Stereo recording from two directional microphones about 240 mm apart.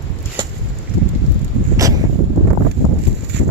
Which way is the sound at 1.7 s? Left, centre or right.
Centre.